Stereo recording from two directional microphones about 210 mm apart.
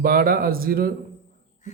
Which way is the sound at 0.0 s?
45° right (ahead or behind).